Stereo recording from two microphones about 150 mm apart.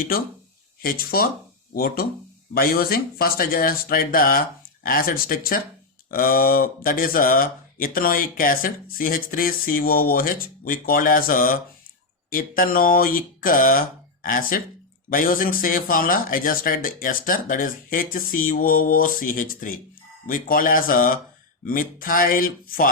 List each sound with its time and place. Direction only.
0.8 s speech: 80° left